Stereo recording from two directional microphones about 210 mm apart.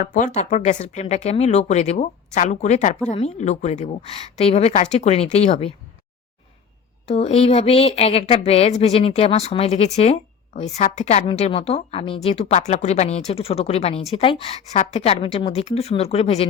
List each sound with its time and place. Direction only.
0.0 s speech: 35° left (ahead or behind)
7.1 s a woman's voice: 30° left (ahead or behind)